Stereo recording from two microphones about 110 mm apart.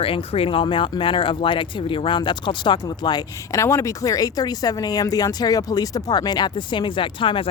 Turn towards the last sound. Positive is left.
turn(degrees=50)  # may be behind; listen again after turning